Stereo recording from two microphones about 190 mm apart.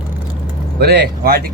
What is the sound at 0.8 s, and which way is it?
Speech, 55° right (ahead or behind).